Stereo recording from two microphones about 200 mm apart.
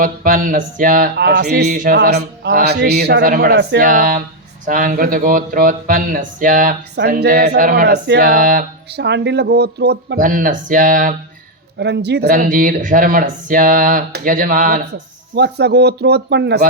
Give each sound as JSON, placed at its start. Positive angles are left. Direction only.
{"t": 0.0, "sound": "speech", "side_deg": -40}
{"t": 1.3, "sound": "speech", "side_deg": -55}
{"t": 2.0, "sound": "speech", "side_deg": -55}
{"t": 3.8, "sound": "speech", "side_deg": -45}
{"t": 11.8, "sound": "speech", "side_deg": -55}
{"t": 15.4, "sound": "speech", "side_deg": -55}